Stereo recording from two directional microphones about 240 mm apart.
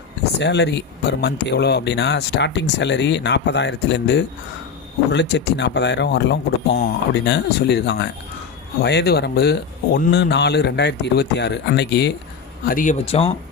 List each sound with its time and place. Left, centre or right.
0.3 s speech: left
12.6 s speech: left